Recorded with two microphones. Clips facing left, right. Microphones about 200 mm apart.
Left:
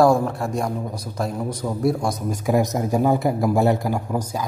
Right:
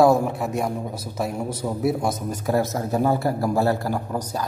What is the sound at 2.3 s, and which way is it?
A man's voice, 15° left (ahead or behind).